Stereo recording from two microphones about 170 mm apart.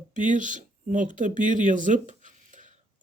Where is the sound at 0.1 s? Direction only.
50° right (ahead or behind).